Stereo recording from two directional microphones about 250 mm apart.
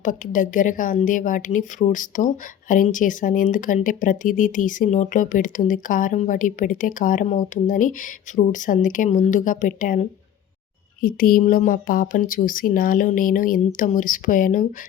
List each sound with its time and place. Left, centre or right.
0.0 s a woman's voice: left